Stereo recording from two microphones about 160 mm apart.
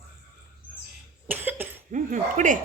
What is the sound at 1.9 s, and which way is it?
Speech, 55° right (ahead or behind).